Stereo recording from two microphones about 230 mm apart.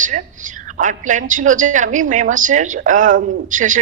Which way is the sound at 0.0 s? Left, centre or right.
Right.